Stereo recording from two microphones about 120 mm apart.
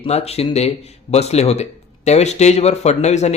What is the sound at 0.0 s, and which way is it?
A man's voice, 60° left (ahead or behind).